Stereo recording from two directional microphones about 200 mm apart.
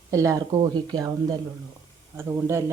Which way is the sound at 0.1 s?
15° right (ahead or behind).